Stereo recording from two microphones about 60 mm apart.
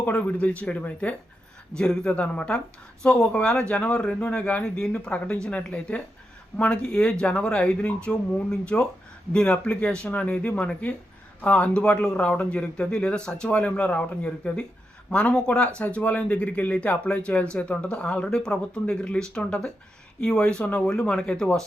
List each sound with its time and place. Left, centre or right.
0.1 s speech: left
1.7 s speech: centre